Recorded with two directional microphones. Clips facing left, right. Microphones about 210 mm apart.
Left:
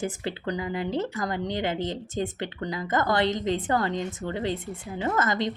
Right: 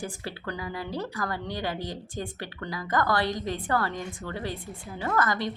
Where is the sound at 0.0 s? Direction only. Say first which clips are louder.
Left 5 dB; 20° left (ahead or behind).